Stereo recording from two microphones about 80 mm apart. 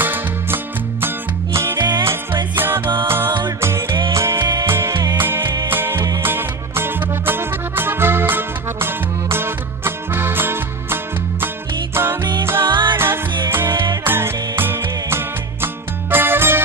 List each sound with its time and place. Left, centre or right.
0.0 s music: right
1.8 s music: right
2.5 s music: right
12.6 s music: right
12.9 s music: right